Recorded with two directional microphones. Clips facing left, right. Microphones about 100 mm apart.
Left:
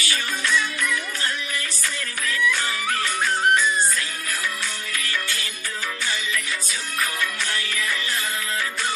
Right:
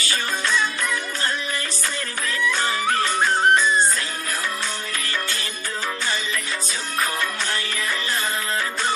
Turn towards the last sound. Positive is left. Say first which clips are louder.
# right 1 dB
turn(degrees=-40)  # may be behind; listen again after turning